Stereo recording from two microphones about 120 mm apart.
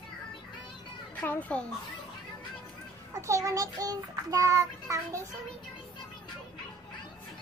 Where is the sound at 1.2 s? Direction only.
15° left (ahead or behind).